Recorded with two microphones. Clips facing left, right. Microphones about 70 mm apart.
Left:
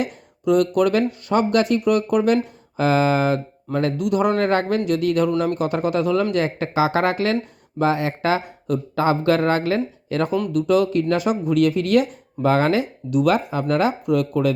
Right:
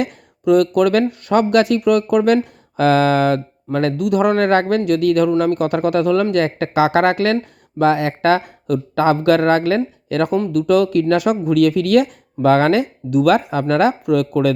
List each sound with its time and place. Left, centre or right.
0.0 s speech: right
3.9 s speech: right
4.9 s speech: right
6.3 s speech: right
10.5 s speech: right
13.2 s speech: right